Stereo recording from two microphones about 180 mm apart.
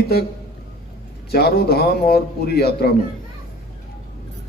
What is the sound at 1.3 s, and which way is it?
A man's voice, 60° left (ahead or behind).